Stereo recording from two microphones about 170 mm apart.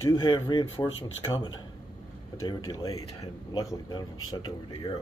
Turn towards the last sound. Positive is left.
turn(degrees=25)  # may be behind; listen again after turning